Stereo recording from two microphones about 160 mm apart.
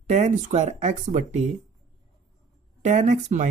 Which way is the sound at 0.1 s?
50° right (ahead or behind).